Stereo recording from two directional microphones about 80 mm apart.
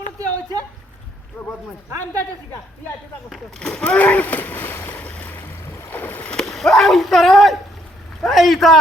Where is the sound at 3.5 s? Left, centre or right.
Centre.